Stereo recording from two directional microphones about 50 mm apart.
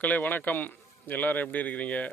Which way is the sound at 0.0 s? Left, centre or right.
Left.